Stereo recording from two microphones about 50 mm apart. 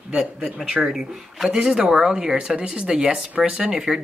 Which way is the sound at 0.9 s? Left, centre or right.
Centre.